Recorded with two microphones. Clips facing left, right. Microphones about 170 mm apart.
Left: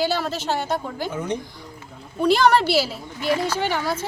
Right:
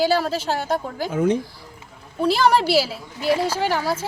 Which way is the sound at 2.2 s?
5° right (ahead or behind).